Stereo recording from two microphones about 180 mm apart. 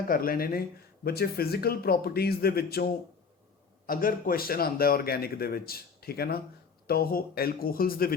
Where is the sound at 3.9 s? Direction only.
50° left (ahead or behind).